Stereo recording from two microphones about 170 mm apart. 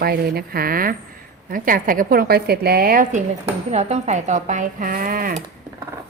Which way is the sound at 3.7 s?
40° right (ahead or behind).